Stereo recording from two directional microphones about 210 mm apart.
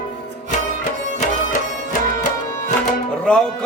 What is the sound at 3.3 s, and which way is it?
Music, 5° left (ahead or behind).